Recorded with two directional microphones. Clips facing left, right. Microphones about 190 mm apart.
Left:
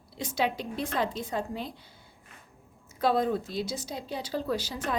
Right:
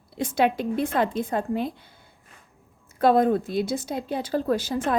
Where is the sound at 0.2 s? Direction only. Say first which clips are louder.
Right 7 dB; 55° right (ahead or behind).